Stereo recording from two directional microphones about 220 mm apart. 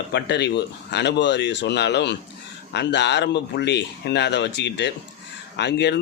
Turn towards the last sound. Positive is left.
turn(degrees=50)  # may be behind; listen again after turning